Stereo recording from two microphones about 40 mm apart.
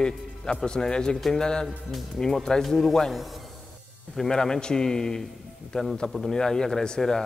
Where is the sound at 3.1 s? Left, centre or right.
Centre.